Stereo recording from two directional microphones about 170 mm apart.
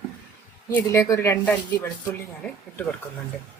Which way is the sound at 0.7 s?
15° left (ahead or behind).